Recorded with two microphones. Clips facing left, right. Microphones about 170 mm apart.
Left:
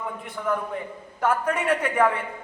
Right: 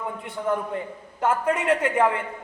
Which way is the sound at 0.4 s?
25° right (ahead or behind).